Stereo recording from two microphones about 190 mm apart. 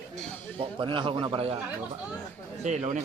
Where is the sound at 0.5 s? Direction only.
30° right (ahead or behind).